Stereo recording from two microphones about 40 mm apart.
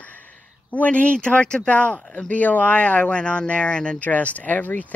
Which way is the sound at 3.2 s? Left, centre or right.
Left.